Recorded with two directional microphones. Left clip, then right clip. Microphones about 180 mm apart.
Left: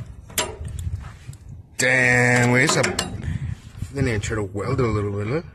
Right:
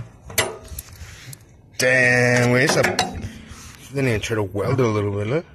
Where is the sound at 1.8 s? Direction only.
20° left (ahead or behind).